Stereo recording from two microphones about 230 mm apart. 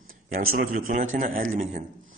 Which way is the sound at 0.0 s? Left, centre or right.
Right.